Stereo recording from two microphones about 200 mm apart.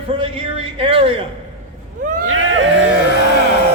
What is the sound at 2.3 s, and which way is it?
Vehicle, 80° right.